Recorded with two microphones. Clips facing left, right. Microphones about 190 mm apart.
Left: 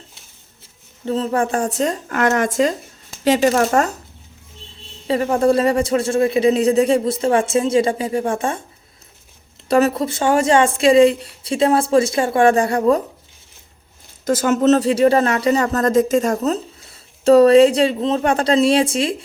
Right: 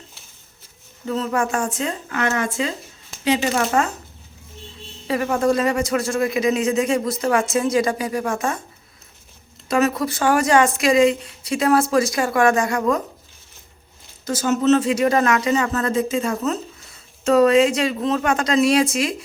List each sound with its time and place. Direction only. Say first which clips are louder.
1.0 s speech: left 3 dB; 30° left (ahead or behind)
5.0 s speech: left 3 dB; 30° left (ahead or behind)
9.6 s speech: left 3 dB; 35° left (ahead or behind)
14.3 s speech: left 3 dB; 50° left (ahead or behind); by 19.1 s 30° left (ahead or behind)